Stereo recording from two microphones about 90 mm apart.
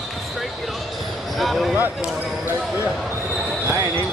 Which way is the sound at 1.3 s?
Centre (ahead or behind).